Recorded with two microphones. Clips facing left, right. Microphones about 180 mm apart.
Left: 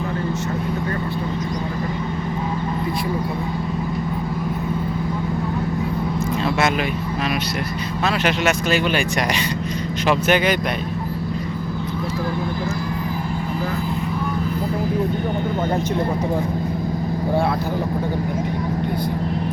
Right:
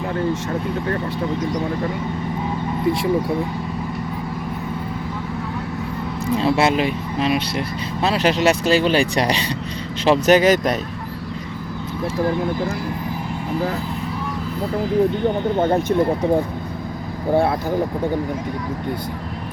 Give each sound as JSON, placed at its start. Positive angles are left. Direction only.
{"t": 6.3, "sound": "speech", "side_deg": -30}